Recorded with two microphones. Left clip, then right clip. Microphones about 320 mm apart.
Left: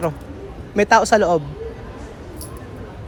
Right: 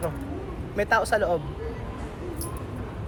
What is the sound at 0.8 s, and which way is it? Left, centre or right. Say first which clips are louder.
Speech: left 9 dB; centre.